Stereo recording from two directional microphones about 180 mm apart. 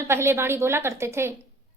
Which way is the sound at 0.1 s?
15° right (ahead or behind).